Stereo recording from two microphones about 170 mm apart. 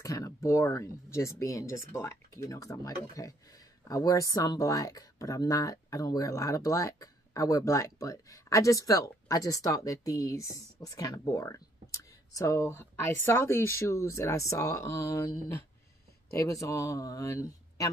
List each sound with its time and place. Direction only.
0.0 s speech: 20° left (ahead or behind)